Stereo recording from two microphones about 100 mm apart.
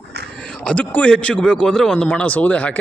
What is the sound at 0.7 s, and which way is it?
A man's voice, 10° left (ahead or behind).